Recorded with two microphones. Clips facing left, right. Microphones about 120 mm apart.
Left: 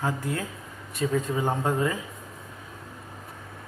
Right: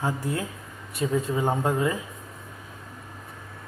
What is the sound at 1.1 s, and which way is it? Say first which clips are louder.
Speech: right 2 dB; 15° right (ahead or behind).